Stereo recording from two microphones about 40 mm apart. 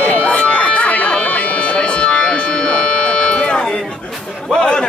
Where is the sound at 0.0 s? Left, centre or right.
Left.